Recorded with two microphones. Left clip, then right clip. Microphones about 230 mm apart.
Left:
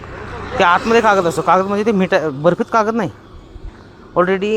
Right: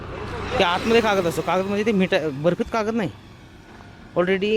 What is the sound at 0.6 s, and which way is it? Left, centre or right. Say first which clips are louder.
A man's voice: left 6 dB; centre.